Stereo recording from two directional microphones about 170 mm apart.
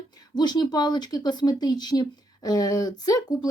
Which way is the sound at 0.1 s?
25° left (ahead or behind).